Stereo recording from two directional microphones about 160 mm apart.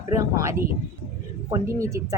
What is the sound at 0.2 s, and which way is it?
Speech, 20° right (ahead or behind).